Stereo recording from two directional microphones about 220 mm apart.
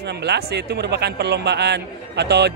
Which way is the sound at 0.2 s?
50° right (ahead or behind).